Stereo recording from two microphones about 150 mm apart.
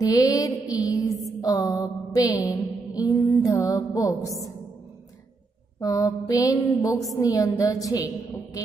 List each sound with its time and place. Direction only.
0.0 s mantra: 25° left (ahead or behind)
5.8 s mantra: 25° left (ahead or behind)